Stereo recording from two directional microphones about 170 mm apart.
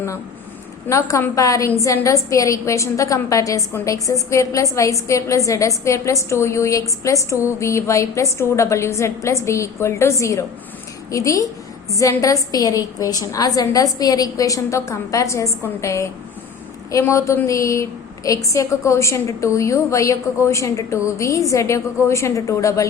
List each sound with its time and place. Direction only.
0.9 s a woman's voice: 15° left (ahead or behind)